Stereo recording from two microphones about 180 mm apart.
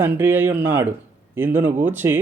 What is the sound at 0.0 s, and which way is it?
Speech, 10° right (ahead or behind).